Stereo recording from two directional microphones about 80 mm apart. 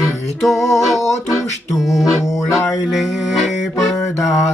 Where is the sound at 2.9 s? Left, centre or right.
Centre.